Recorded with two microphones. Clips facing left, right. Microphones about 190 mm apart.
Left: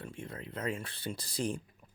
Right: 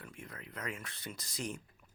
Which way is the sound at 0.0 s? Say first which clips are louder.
Left 6 dB; 30° left (ahead or behind).